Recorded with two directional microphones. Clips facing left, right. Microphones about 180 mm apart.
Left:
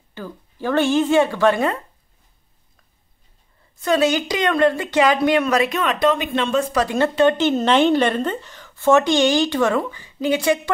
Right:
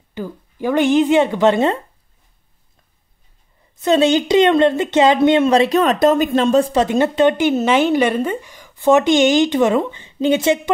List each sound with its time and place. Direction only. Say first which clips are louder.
0.1 s speech: right 6 dB; 15° right (ahead or behind)
3.8 s speech: right 4 dB; 25° right (ahead or behind)